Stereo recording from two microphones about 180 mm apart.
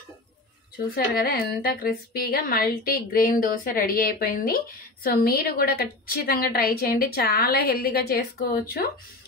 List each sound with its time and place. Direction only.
0.9 s a woman's voice: 55° left (ahead or behind)